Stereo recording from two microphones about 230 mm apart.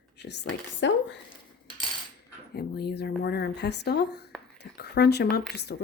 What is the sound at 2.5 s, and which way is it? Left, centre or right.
A woman's voice, left.